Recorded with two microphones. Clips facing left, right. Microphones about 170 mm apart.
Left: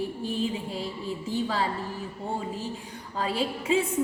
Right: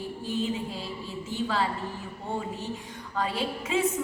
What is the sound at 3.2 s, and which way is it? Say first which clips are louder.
Speech: left 1 dB; 30° left (ahead or behind).